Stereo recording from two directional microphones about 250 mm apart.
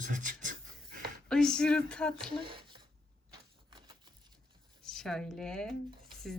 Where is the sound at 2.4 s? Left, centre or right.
Centre.